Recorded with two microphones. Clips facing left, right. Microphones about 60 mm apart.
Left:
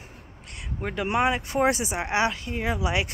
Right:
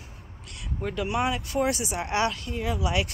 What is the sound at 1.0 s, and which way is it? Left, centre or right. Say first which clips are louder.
Speech: left 4 dB; left.